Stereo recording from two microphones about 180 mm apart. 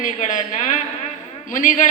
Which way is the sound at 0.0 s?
45° left (ahead or behind).